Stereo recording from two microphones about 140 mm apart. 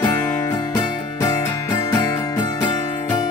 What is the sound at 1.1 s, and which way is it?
Music, 25° left (ahead or behind).